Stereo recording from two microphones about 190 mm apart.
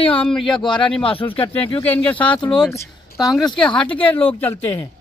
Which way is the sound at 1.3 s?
30° left (ahead or behind).